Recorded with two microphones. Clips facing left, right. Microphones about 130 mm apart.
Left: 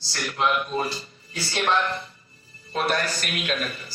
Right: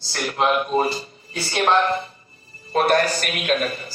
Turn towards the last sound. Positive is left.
turn(degrees=-55)  # may be behind; listen again after turning